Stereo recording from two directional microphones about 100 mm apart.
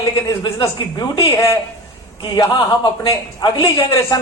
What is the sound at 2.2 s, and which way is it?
A man's voice, 55° left (ahead or behind).